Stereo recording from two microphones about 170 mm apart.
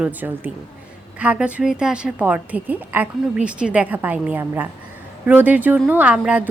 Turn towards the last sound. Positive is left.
turn(degrees=-5)  # may be behind; listen again after turning